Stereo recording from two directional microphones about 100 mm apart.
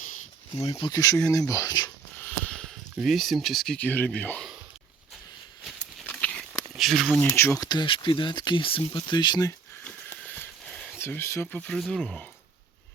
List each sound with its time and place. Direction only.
0.9 s speech: 35° left (ahead or behind)
2.1 s a sound: 15° left (ahead or behind)
2.9 s speech: centre (ahead or behind)
3.8 s speech: 15° left (ahead or behind)
6.1 s a sound: 10° left (ahead or behind)
6.7 s speech: centre (ahead or behind)
7.3 s speech: 25° left (ahead or behind)
7.6 s speech: 45° left (ahead or behind)
7.9 s speech: 55° left (ahead or behind)
9.0 s speech: 45° left (ahead or behind)
10.2 s a sound: 20° left (ahead or behind)
10.9 s speech: 25° left (ahead or behind)
11.5 s speech: 10° left (ahead or behind)